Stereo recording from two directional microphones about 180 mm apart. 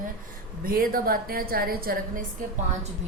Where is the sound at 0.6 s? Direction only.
55° right (ahead or behind).